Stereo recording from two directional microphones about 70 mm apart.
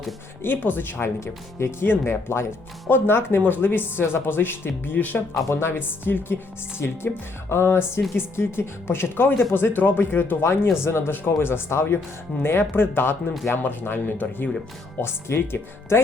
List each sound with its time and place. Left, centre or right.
0.4 s speech: left
1.2 s speech: left